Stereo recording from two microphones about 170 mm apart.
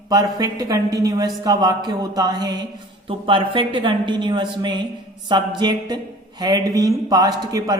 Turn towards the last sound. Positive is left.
turn(degrees=-20)  # may be behind; listen again after turning